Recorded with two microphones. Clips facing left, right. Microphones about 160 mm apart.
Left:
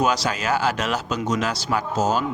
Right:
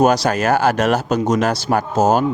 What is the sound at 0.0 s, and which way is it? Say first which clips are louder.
Speech: right 7 dB; 50° right (ahead or behind).